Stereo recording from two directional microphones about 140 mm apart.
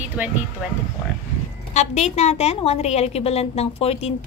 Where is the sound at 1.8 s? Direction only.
55° left (ahead or behind).